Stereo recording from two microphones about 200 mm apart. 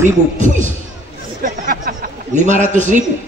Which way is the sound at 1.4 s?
40° right (ahead or behind).